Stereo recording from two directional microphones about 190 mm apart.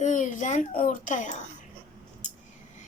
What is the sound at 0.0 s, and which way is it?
A child's voice, 40° left (ahead or behind).